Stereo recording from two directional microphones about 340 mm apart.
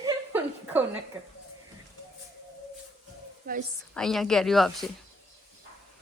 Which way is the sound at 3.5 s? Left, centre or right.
Right.